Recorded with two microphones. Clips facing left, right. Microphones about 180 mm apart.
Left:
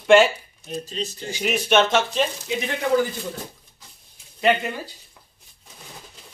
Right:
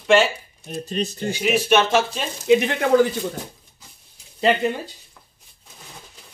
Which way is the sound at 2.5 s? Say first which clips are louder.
Right 12 dB; 65° right (ahead or behind).